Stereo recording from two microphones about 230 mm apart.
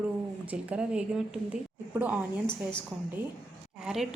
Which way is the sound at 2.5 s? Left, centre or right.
Centre.